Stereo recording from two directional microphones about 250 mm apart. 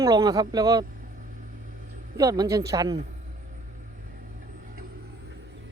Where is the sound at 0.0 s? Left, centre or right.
Centre.